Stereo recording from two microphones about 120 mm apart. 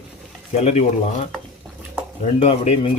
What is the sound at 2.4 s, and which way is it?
Speech, 55° left (ahead or behind).